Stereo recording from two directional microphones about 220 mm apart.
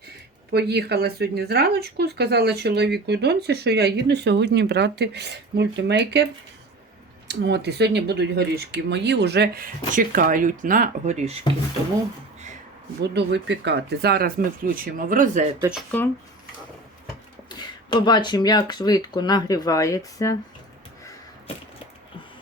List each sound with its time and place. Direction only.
0.5 s speech: 50° right (ahead or behind)
7.3 s speech: 50° right (ahead or behind); by 11.3 s 30° right (ahead or behind)
13.0 s speech: 50° right (ahead or behind)
15.9 s speech: 10° left (ahead or behind)
17.5 s speech: 20° left (ahead or behind)